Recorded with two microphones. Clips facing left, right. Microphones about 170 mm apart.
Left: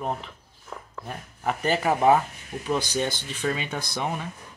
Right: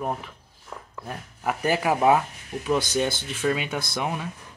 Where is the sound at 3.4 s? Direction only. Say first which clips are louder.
Right 3 dB; 10° right (ahead or behind).